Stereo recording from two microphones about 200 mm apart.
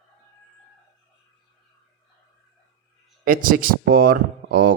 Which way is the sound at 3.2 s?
45° right (ahead or behind).